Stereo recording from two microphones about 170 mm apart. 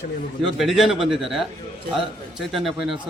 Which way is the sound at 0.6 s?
Centre (ahead or behind).